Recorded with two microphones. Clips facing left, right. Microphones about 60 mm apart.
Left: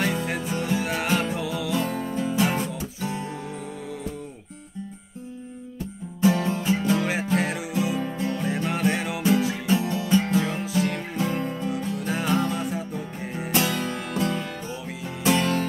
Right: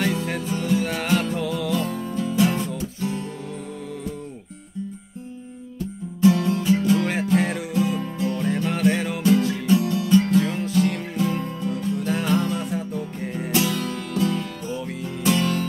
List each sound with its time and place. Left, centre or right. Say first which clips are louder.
0.1 s music: right 1 dB; centre
1.8 s music: even; left
2.7 s music: right 3 dB; centre
6.3 s music: right 3 dB; left
7.0 s music: right 3 dB; centre
8.0 s music: right 1 dB; left
8.4 s music: right 4 dB; centre
9.7 s music: right 5 dB; left
10.4 s music: right 3 dB; centre
10.9 s music: right 2 dB; left
11.7 s music: right 3 dB; centre
13.6 s music: right 1 dB; left